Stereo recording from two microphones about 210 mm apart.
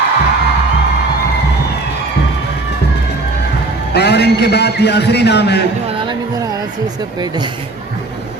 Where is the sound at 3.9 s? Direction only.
50° left (ahead or behind).